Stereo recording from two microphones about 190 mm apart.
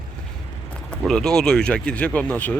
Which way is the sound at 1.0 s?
5° left (ahead or behind).